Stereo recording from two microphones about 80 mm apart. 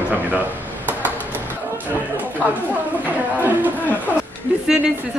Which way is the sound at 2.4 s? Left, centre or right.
Right.